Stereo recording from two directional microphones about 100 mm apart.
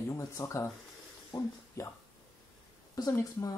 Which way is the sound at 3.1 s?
35° left (ahead or behind).